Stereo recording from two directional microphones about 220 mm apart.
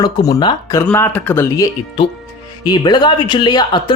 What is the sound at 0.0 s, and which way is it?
Speech, 15° left (ahead or behind).